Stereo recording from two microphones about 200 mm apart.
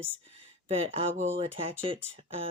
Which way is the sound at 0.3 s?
30° right (ahead or behind).